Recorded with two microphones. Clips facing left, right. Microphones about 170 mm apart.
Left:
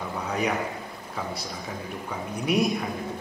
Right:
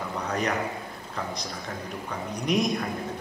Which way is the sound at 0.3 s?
Centre (ahead or behind).